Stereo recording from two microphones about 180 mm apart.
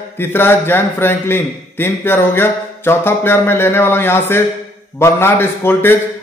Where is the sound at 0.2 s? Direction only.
10° left (ahead or behind).